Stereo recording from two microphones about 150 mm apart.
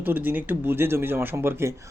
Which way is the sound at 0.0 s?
15° right (ahead or behind).